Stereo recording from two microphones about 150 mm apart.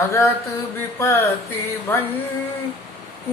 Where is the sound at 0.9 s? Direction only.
20° left (ahead or behind).